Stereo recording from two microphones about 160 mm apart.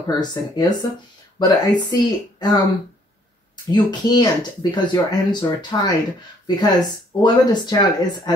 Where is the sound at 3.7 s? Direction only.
25° left (ahead or behind).